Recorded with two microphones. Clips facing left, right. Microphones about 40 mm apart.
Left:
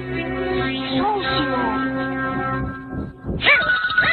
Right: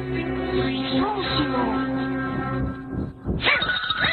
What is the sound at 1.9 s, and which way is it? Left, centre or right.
Music, left.